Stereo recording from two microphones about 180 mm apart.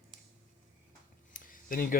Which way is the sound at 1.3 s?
50° left (ahead or behind).